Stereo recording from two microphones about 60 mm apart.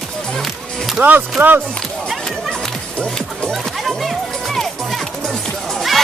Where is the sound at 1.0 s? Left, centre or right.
Right.